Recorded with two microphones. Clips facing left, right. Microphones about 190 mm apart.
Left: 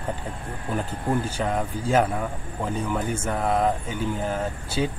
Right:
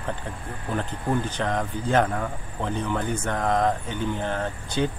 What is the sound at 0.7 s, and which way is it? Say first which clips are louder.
A man's voice: even; 10° left (ahead or behind).